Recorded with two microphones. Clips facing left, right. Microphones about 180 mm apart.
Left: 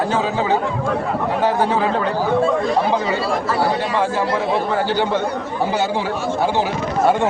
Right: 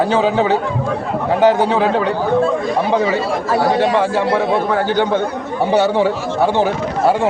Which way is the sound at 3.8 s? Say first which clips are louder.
Right 5 dB; 75° right (ahead or behind).